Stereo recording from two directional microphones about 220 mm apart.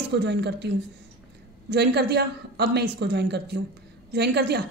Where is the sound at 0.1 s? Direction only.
50° right (ahead or behind).